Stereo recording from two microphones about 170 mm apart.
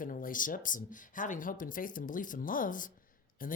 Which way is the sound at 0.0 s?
55° left (ahead or behind).